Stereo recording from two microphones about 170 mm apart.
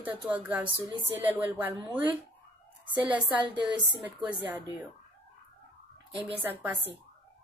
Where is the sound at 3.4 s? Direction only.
25° right (ahead or behind).